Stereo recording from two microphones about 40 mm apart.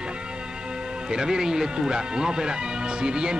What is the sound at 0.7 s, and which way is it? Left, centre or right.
Speech, right.